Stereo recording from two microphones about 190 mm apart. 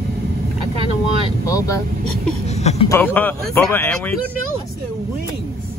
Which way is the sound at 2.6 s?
35° left (ahead or behind).